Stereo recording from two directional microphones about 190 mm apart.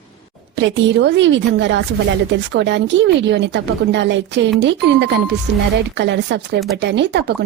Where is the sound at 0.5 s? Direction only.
70° right (ahead or behind).